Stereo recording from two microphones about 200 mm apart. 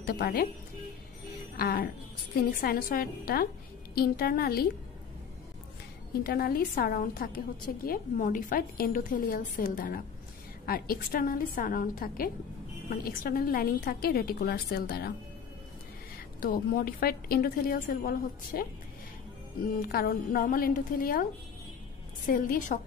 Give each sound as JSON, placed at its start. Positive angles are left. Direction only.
{"t": 0.0, "sound": "a woman's voice", "side_deg": 50}
{"t": 1.6, "sound": "a woman's voice", "side_deg": 50}
{"t": 6.2, "sound": "a woman's voice", "side_deg": 50}
{"t": 16.3, "sound": "a woman's voice", "side_deg": 45}
{"t": 22.3, "sound": "a woman's voice", "side_deg": 45}